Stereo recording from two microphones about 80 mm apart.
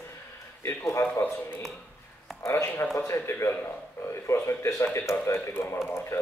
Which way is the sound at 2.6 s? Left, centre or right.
Left.